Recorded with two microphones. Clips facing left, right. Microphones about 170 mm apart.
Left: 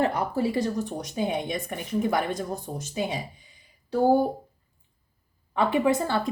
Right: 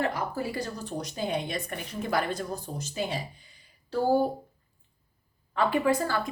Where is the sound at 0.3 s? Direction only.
20° left (ahead or behind).